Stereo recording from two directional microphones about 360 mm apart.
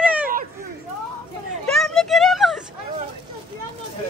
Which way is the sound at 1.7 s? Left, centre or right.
Centre.